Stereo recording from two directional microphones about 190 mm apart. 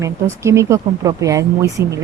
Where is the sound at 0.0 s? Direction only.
15° right (ahead or behind).